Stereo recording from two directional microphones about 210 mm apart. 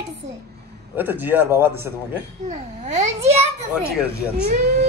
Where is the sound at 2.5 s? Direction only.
30° right (ahead or behind).